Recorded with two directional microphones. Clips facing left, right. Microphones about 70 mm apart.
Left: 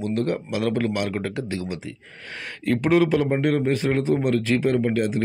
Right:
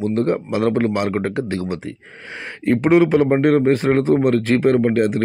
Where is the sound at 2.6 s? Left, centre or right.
Right.